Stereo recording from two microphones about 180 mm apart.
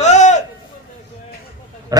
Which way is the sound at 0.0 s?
40° left (ahead or behind).